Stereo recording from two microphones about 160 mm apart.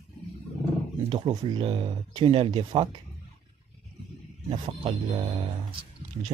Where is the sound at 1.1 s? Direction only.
30° right (ahead or behind).